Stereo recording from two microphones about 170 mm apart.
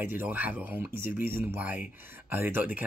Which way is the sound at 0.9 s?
55° left (ahead or behind).